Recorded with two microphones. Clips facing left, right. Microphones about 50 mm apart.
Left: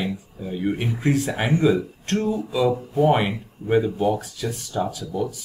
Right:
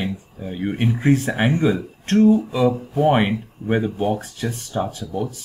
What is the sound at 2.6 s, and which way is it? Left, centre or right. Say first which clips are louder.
Speech: even; centre.